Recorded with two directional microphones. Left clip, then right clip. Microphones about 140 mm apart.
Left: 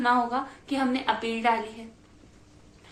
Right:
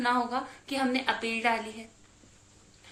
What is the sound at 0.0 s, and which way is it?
A woman's voice, 40° right (ahead or behind).